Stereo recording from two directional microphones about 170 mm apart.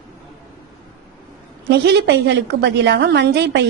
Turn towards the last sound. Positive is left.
turn(degrees=-90)